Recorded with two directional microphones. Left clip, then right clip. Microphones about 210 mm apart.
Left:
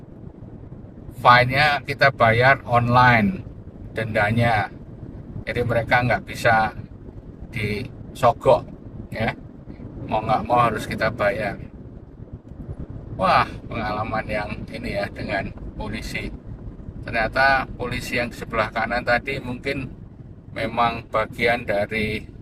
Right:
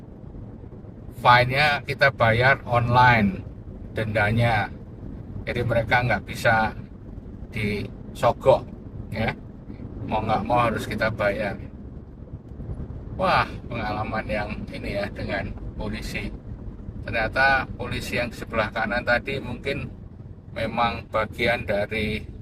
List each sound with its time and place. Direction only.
1.2 s speech: 20° left (ahead or behind)
10.1 s speech: 20° left (ahead or behind)
13.1 s speech: 20° left (ahead or behind)
17.1 s speech: 20° left (ahead or behind)